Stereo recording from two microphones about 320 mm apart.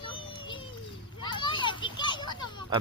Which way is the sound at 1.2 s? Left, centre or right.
Centre.